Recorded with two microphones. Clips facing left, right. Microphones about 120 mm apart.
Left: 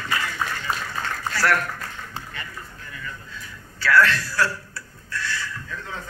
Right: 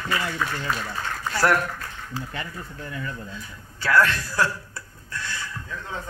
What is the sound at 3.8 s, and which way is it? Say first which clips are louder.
Speech: left 1 dB; 20° right (ahead or behind).